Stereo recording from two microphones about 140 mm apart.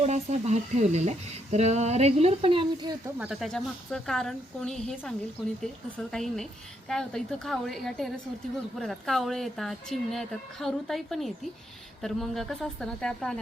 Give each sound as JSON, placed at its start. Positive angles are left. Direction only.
{"t": 0.0, "sound": "speech", "side_deg": -55}
{"t": 3.2, "sound": "speech", "side_deg": 0}